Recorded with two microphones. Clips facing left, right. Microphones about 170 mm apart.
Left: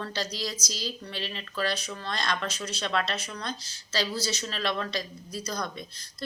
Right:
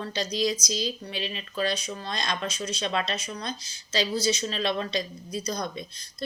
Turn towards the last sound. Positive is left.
turn(degrees=-20)  # may be behind; listen again after turning